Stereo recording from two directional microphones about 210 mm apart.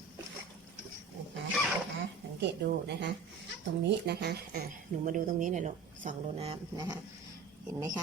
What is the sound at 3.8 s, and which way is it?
Speech, 55° right (ahead or behind).